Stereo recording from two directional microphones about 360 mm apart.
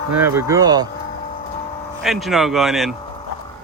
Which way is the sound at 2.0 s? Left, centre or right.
Centre.